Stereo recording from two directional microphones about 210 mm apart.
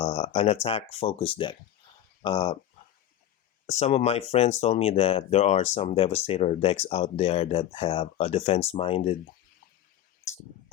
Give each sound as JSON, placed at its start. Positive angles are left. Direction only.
{"t": 0.0, "sound": "speech", "side_deg": 30}
{"t": 3.7, "sound": "speech", "side_deg": 30}